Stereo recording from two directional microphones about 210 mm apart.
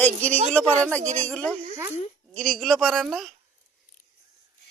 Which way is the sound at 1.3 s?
5° left (ahead or behind).